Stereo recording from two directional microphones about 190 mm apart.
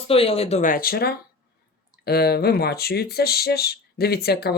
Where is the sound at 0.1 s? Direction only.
30° left (ahead or behind).